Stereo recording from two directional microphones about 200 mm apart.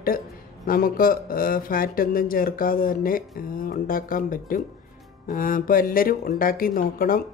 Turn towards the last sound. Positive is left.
turn(degrees=45)  # may be behind; listen again after turning